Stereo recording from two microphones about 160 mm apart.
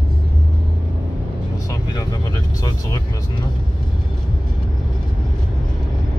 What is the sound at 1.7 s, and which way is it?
Speech, 20° left (ahead or behind).